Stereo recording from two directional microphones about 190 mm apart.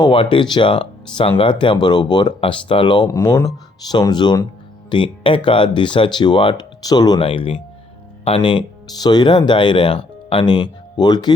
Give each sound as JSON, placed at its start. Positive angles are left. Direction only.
{"t": 0.0, "sound": "speech", "side_deg": 25}